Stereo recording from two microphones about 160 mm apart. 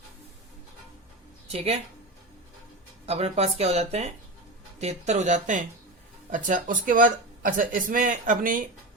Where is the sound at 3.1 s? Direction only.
40° right (ahead or behind); by 8.6 s 60° right (ahead or behind).